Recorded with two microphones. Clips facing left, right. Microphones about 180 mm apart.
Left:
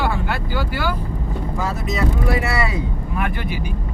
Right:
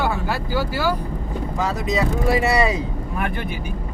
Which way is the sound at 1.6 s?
15° right (ahead or behind).